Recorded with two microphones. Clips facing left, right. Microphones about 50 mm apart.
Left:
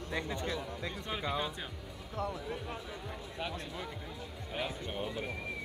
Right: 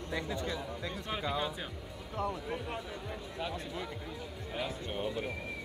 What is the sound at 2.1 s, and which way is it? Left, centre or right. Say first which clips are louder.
Speech: right 2 dB; right.